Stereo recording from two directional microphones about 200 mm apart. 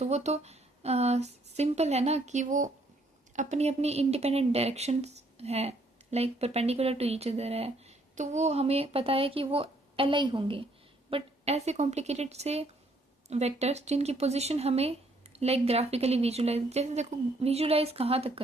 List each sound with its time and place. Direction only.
0.0 s speech: 35° right (ahead or behind)